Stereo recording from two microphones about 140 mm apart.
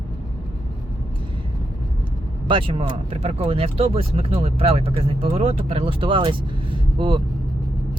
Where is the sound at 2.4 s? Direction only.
40° right (ahead or behind).